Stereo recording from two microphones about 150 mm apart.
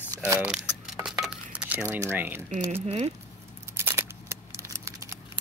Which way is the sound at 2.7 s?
45° right (ahead or behind).